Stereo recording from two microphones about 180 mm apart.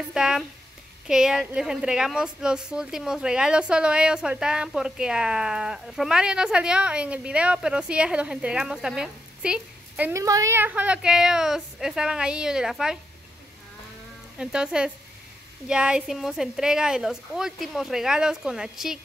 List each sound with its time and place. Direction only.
0.1 s a woman's voice: 5° right (ahead or behind)
14.4 s a woman's voice: 5° right (ahead or behind)